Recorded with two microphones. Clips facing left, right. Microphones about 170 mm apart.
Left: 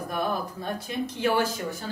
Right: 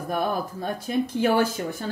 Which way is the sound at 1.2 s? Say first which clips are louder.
Right 2 dB; 50° right (ahead or behind).